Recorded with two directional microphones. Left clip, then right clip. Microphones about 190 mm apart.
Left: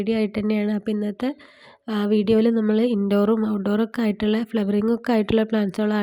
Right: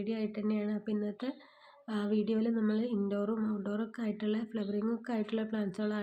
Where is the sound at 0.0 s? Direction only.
45° left (ahead or behind).